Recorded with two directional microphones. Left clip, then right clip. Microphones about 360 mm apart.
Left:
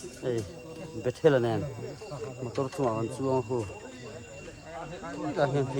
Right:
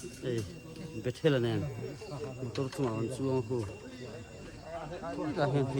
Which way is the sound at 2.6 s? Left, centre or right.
Centre.